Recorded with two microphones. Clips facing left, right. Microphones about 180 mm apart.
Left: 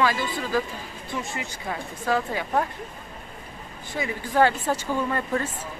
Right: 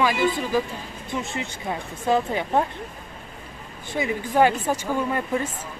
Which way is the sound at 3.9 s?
20° right (ahead or behind).